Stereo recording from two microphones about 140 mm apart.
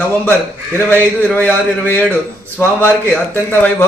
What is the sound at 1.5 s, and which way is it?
A man's voice, 10° left (ahead or behind).